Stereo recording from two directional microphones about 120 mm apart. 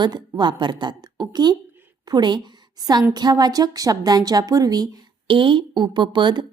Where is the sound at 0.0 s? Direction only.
40° right (ahead or behind).